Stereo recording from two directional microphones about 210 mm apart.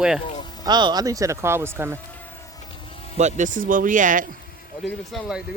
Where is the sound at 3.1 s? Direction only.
35° right (ahead or behind).